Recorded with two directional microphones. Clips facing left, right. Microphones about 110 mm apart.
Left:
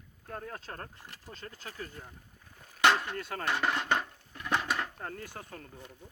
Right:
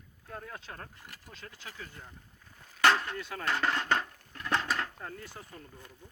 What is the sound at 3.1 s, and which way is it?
Speech, 50° left (ahead or behind).